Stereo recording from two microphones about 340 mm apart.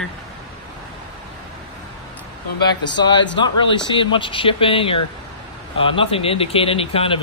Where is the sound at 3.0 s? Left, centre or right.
Centre.